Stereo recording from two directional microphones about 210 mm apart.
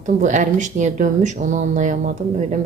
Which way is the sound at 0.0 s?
35° right (ahead or behind).